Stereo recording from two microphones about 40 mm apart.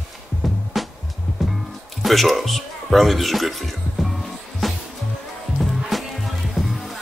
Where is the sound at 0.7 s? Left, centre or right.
Centre.